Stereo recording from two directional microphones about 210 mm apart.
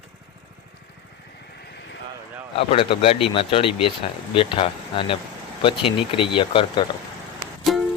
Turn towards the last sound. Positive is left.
turn(degrees=0)  # may be behind; listen again after turning